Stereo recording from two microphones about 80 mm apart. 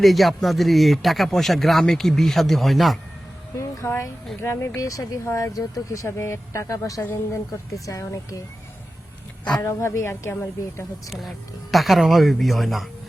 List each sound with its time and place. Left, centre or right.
0.0 s speech: centre
3.6 s speech: left
9.6 s speech: left
11.7 s speech: centre